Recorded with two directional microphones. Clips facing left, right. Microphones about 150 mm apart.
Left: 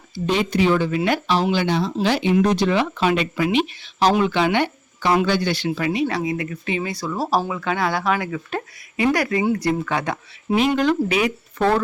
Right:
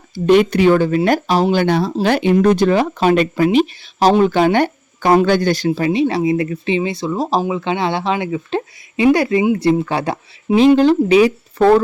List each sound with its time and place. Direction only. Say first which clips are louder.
0.1 s speech: right 9 dB; 55° right (ahead or behind); by 11.8 s 30° right (ahead or behind)